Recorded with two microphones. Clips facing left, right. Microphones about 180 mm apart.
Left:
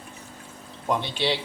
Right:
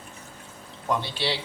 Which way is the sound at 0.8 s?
20° left (ahead or behind).